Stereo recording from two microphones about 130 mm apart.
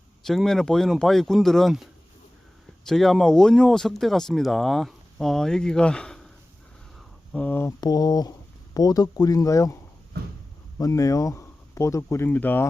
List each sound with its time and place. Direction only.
0.3 s speech: 5° left (ahead or behind)
7.3 s speech: 15° left (ahead or behind)
7.8 s speech: 30° left (ahead or behind)
10.8 s speech: 25° left (ahead or behind)